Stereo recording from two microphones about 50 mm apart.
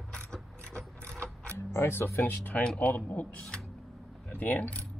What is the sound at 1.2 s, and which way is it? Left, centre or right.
Mechanisms, left.